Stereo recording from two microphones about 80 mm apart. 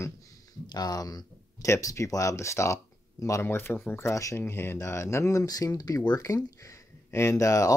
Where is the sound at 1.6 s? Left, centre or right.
Left.